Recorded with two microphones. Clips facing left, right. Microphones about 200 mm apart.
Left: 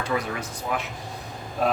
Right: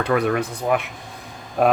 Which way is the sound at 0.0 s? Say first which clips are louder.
Right 8 dB; 60° right (ahead or behind).